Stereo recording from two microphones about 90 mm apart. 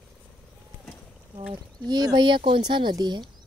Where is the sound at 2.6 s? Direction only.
55° right (ahead or behind).